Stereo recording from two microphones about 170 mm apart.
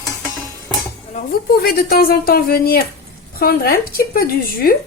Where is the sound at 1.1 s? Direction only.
60° left (ahead or behind).